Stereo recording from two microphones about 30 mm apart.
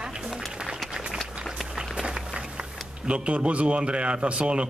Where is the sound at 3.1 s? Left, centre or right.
Right.